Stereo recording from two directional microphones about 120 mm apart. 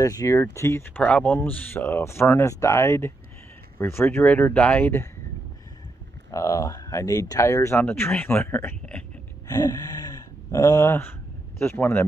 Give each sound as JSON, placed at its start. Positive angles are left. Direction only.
{"t": 0.0, "sound": "speech", "side_deg": 30}
{"t": 6.3, "sound": "speech", "side_deg": 30}
{"t": 9.5, "sound": "speech", "side_deg": 30}